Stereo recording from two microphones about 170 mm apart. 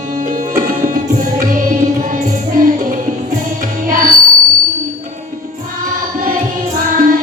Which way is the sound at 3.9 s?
55° right (ahead or behind).